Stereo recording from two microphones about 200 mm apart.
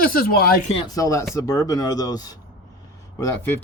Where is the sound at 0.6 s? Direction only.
30° left (ahead or behind).